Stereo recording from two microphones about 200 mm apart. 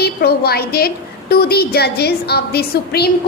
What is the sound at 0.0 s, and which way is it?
A woman's voice, 50° left (ahead or behind).